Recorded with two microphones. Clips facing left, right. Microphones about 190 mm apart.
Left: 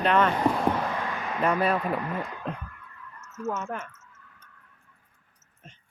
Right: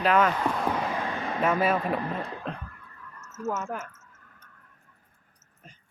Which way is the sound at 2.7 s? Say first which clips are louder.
Left 1 dB; 35° right (ahead or behind).